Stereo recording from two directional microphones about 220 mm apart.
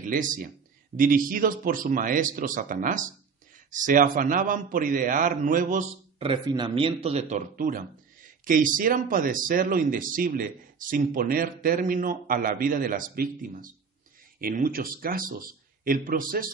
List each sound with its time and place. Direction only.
0.0 s a man's voice: 35° right (ahead or behind)